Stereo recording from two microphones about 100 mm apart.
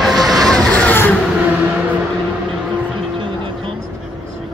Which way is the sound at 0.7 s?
15° left (ahead or behind).